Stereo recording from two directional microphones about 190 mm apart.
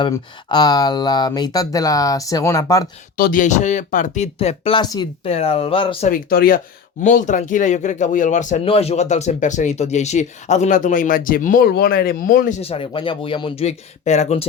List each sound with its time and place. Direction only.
0.0 s speech: 20° left (ahead or behind)
3.2 s speech: 45° left (ahead or behind); by 6.1 s 30° left (ahead or behind)
6.1 s speech: 50° left (ahead or behind)
12.5 s speech: 30° left (ahead or behind)